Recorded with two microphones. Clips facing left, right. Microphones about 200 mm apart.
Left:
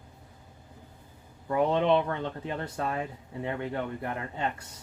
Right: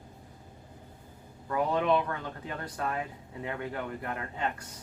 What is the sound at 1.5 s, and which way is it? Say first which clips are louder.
Speech: left 3 dB; 25° left (ahead or behind).